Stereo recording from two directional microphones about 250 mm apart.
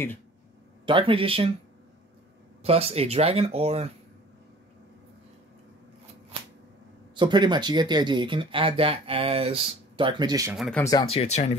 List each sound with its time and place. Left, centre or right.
0.8 s speech: right
2.6 s speech: right
7.2 s speech: centre
10.6 s speech: centre; by 11.5 s left